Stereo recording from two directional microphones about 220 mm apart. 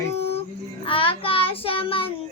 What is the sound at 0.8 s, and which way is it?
Child singing, 25° left (ahead or behind).